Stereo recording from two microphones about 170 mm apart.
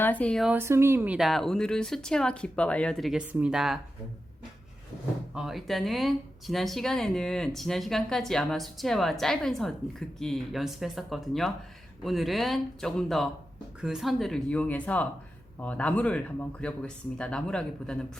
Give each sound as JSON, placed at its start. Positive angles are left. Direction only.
{"t": 0.0, "sound": "speech", "side_deg": 10}
{"t": 0.5, "sound": "speech", "side_deg": -15}
{"t": 5.3, "sound": "speech", "side_deg": -5}